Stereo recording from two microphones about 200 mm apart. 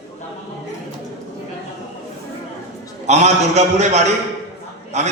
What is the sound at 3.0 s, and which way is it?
A man's voice, 35° right (ahead or behind).